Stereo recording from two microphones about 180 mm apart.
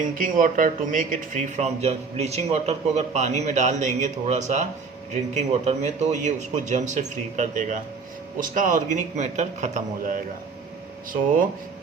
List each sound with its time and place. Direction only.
0.0 s a man's voice: 50° right (ahead or behind)